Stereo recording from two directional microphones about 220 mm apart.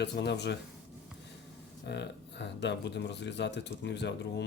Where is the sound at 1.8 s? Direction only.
50° left (ahead or behind).